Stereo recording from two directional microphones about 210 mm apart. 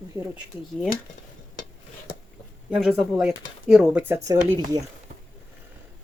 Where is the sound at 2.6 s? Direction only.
5° right (ahead or behind).